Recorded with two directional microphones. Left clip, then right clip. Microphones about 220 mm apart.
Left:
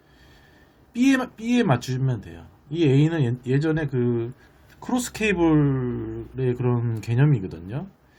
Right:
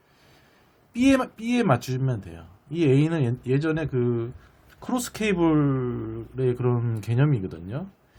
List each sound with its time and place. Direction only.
0.9 s speech: 15° right (ahead or behind)